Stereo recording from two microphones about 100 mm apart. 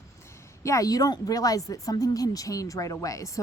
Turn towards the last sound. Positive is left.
turn(degrees=35)  # may be behind; listen again after turning